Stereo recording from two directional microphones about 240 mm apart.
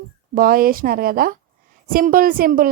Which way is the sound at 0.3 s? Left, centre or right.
Right.